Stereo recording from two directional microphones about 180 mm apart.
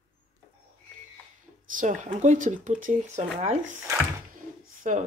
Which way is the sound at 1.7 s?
45° right (ahead or behind).